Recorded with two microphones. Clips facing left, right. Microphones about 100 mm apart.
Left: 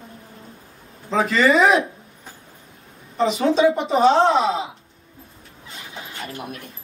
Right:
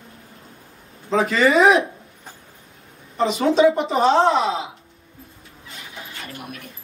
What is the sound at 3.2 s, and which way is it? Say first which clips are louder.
Speech: right 1 dB; centre (ahead or behind).